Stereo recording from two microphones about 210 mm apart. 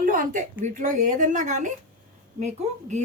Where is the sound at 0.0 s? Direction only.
40° right (ahead or behind).